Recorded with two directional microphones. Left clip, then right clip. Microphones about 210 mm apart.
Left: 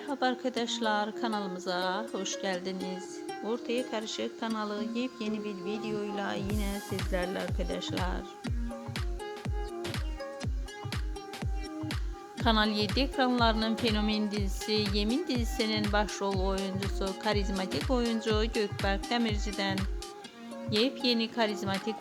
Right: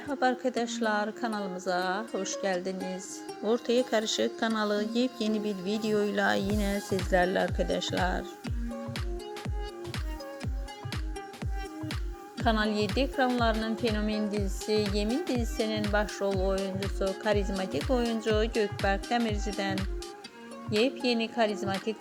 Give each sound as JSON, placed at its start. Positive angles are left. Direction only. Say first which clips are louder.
{"t": 0.1, "sound": "a woman's voice", "louder": "right 3 dB", "side_deg": -5}
{"t": 3.4, "sound": "speech", "louder": "right 7 dB", "side_deg": -15}
{"t": 12.4, "sound": "a woman's voice", "louder": "even", "side_deg": 0}